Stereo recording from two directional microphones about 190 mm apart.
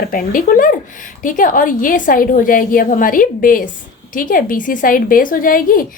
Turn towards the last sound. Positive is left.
turn(degrees=50)  # may be behind; listen again after turning